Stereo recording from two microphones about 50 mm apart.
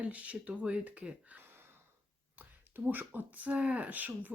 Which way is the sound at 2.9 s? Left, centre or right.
Right.